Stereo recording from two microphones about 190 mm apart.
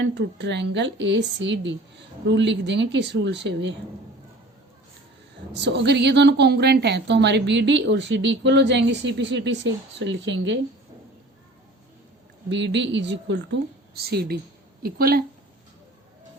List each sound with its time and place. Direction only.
0.0 s a woman's voice: 65° right (ahead or behind)
5.5 s a woman's voice: 65° right (ahead or behind)
12.5 s a woman's voice: 70° right (ahead or behind); by 15.2 s 50° right (ahead or behind)